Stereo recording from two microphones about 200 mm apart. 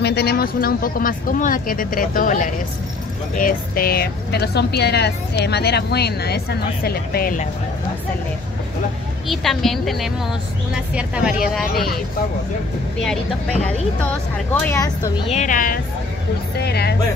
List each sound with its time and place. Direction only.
0.0 s speech: 55° left (ahead or behind)
9.3 s speech: centre (ahead or behind)
13.0 s speech: 5° left (ahead or behind)
15.2 s a woman's voice: 35° left (ahead or behind)
16.6 s speech: 55° left (ahead or behind)